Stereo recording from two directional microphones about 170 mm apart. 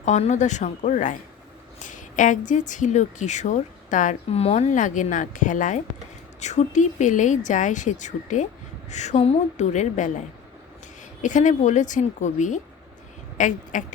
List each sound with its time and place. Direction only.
0.0 s speech: 45° left (ahead or behind)
11.2 s speech: 45° left (ahead or behind)